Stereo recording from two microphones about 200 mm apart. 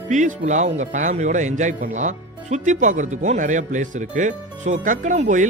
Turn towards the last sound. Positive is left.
turn(degrees=-40)  # may be behind; listen again after turning